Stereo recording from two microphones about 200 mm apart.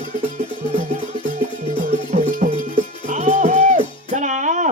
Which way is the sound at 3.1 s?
40° right (ahead or behind).